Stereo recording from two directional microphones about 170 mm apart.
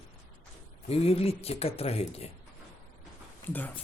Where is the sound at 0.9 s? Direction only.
35° left (ahead or behind).